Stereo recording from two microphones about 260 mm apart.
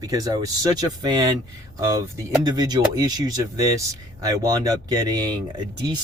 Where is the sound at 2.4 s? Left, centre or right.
Centre.